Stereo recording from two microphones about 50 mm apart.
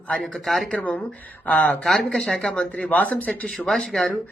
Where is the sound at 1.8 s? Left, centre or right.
Centre.